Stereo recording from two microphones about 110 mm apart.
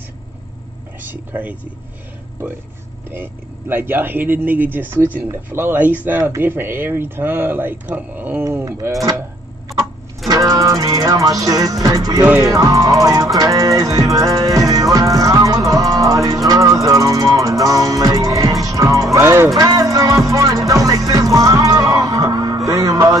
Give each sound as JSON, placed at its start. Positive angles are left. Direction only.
{"t": 1.0, "sound": "speech", "side_deg": -15}
{"t": 3.1, "sound": "speech", "side_deg": -20}
{"t": 9.8, "sound": "music", "side_deg": -30}
{"t": 12.4, "sound": "speech", "side_deg": -30}
{"t": 13.4, "sound": "music", "side_deg": -30}